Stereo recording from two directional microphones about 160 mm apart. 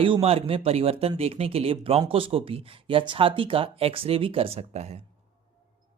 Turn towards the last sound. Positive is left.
turn(degrees=-45)  # may be behind; listen again after turning